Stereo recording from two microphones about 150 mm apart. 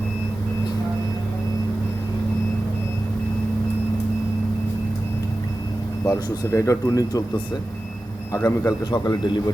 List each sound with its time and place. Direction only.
6.1 s speech: 20° left (ahead or behind)
8.3 s speech: 20° left (ahead or behind)